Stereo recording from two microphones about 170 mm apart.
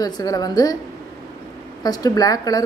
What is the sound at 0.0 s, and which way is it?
Speech, 20° left (ahead or behind).